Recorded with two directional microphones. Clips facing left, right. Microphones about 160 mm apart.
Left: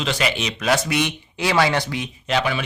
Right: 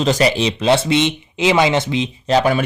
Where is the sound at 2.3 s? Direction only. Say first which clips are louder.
Right 7 dB; 40° right (ahead or behind).